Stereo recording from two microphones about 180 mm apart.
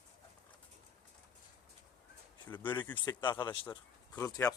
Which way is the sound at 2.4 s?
10° left (ahead or behind).